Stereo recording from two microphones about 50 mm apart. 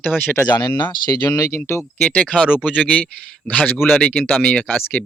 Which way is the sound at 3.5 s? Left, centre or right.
Left.